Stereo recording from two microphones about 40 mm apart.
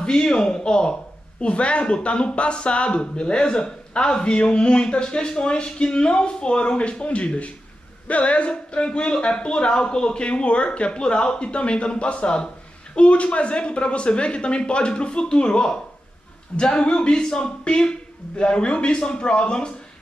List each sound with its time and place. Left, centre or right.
0.0 s speech: left